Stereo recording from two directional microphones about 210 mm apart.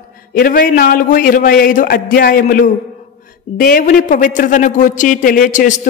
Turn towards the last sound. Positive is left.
turn(degrees=35)  # may be behind; listen again after turning